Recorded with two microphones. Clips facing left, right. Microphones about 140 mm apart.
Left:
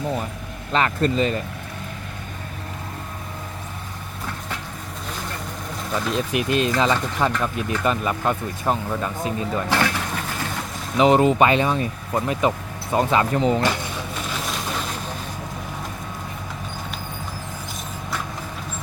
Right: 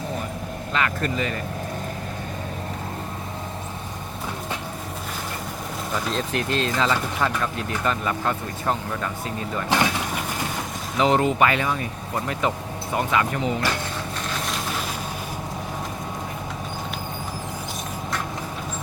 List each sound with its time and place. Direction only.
0.7 s speech: 30° left (ahead or behind)
6.1 s speech: 15° left (ahead or behind)
9.6 s speech: 20° right (ahead or behind)
10.9 s speech: 20° left (ahead or behind)